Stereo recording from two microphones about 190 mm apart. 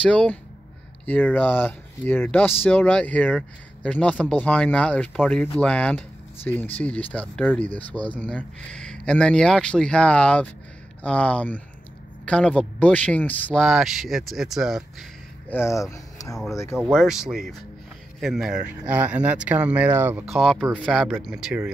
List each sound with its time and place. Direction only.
0.1 s speech: 5° left (ahead or behind)
15.5 s speech: 15° left (ahead or behind)
16.9 s speech: centre (ahead or behind)
20.3 s speech: centre (ahead or behind)